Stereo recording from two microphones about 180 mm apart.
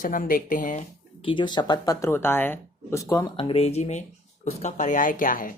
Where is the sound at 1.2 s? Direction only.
30° left (ahead or behind); by 3.0 s 10° left (ahead or behind).